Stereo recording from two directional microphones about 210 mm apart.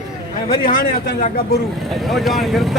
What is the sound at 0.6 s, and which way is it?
Speech, 45° left (ahead or behind).